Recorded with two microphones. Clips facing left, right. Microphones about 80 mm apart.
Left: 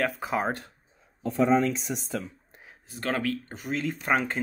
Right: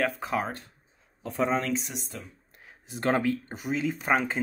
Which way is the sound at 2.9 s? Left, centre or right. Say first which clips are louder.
Right 3 dB; right.